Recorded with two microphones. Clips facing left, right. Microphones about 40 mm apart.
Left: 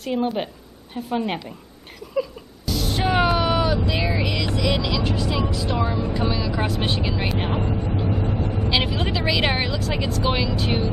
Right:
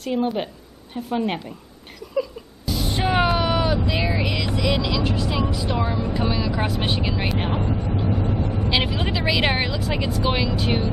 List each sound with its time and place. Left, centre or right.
0.0 s speech: centre
2.6 s a sound: centre
6.0 s speech: centre
8.2 s vehicle: left
8.6 s speech: centre